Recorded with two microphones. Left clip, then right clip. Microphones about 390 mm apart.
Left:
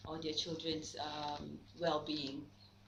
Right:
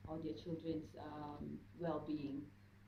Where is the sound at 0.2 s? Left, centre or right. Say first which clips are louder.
Left 10 dB; left.